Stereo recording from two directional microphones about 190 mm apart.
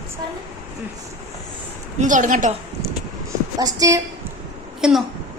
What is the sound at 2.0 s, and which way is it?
Speech, 40° right (ahead or behind).